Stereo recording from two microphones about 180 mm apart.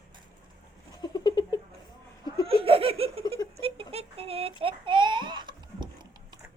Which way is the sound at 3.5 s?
30° right (ahead or behind).